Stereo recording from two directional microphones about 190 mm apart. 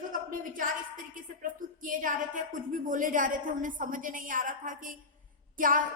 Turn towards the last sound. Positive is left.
turn(degrees=-45)  # may be behind; listen again after turning